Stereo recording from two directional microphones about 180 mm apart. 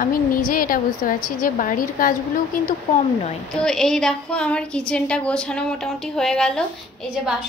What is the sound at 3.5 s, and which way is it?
A woman's voice, 5° left (ahead or behind).